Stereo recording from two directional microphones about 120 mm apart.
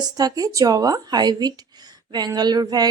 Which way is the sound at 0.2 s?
30° right (ahead or behind).